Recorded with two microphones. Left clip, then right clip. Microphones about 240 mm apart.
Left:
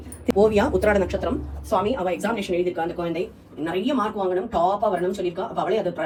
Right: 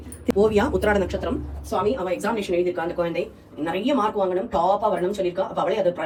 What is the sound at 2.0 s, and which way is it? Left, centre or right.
Speech, centre.